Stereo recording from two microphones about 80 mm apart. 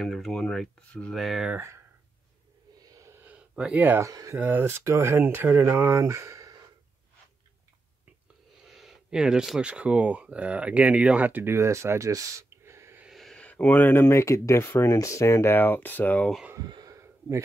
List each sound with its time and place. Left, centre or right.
0.0 s speech: centre
1.1 s speech: centre
2.9 s wheeze: right
3.3 s speech: centre
4.0 s speech: right
4.4 s speech: right
8.6 s speech: centre; by 11.5 s right
11.5 s speech: right
13.1 s a sound: centre
13.4 s speech: centre
16.5 s a sound: right
16.9 s a sound: right